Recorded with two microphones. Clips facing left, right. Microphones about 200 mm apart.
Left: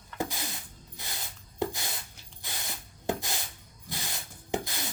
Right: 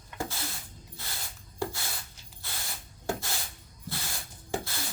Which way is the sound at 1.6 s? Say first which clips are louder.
Left 2 dB; 20° left (ahead or behind).